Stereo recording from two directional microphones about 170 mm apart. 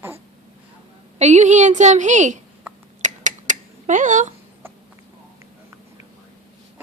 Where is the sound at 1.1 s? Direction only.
40° right (ahead or behind).